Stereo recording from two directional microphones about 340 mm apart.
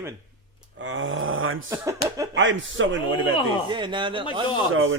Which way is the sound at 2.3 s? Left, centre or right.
Right.